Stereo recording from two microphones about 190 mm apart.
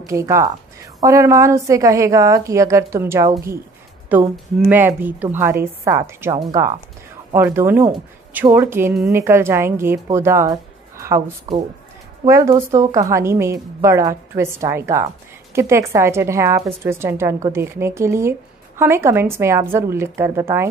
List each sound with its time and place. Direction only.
0.0 s a woman's voice: 15° right (ahead or behind)